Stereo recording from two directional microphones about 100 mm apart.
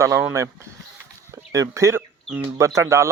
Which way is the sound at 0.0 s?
25° right (ahead or behind).